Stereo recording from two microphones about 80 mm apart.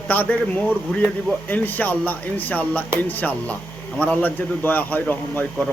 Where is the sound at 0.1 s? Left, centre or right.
Left.